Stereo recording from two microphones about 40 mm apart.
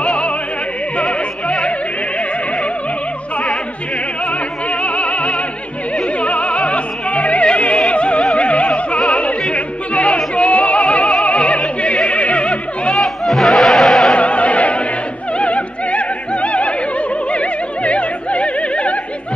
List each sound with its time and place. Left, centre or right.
0.0 s music: left
4.8 s music: left
12.9 s music: centre
14.1 s music: left
15.3 s opera: left
17.3 s music: left